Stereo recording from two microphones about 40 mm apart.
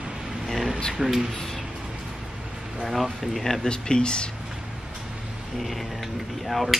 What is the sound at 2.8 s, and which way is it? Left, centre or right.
Speech, centre.